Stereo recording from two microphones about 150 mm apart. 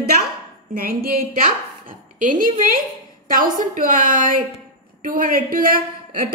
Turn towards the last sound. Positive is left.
turn(degrees=-75)  # may be behind; listen again after turning